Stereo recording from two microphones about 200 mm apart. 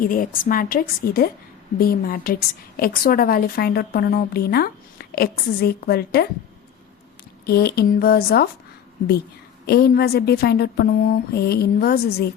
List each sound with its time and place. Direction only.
0.0 s a woman's voice: 45° left (ahead or behind)
7.4 s a woman's voice: 55° left (ahead or behind)
9.6 s a woman's voice: 50° left (ahead or behind)